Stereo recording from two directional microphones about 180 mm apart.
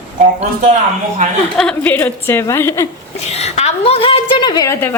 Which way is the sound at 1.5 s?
5° left (ahead or behind).